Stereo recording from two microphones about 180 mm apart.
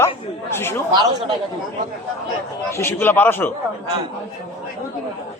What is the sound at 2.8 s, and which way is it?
Speech, 15° left (ahead or behind).